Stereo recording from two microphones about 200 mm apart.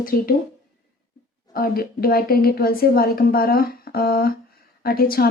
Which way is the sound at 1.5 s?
45° left (ahead or behind).